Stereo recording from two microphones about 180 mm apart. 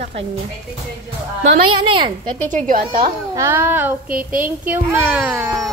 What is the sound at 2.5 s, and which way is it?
Speech, 50° right (ahead or behind).